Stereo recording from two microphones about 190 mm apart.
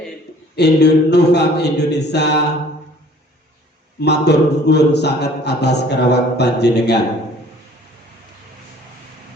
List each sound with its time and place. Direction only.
0.5 s speech: 60° left (ahead or behind)
4.0 s speech: 60° left (ahead or behind)